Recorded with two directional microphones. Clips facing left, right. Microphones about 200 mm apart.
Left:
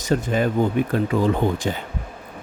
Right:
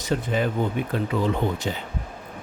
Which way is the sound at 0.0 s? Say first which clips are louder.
Left 3 dB; 45° left (ahead or behind).